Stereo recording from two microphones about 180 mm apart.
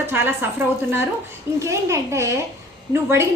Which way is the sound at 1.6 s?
15° right (ahead or behind).